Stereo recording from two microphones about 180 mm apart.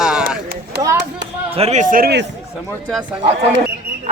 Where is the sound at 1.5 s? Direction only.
35° right (ahead or behind); by 2.3 s 65° right (ahead or behind).